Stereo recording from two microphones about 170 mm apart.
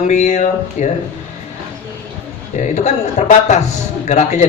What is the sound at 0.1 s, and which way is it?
Speech, 45° left (ahead or behind).